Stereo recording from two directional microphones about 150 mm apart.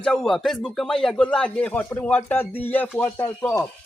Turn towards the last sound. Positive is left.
turn(degrees=15)  # may be behind; listen again after turning